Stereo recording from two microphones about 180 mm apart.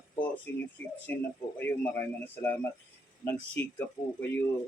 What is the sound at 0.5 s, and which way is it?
Speech, 75° left (ahead or behind).